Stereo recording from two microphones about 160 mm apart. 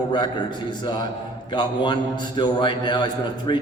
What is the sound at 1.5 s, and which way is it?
A man's voice, 30° left (ahead or behind).